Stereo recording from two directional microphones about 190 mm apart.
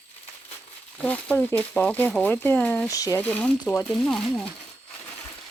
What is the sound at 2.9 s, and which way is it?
Speech, 20° left (ahead or behind).